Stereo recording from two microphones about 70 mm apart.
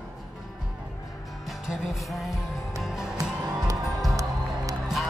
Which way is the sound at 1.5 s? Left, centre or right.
Centre.